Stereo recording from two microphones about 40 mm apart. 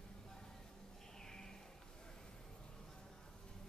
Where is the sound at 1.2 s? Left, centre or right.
Centre.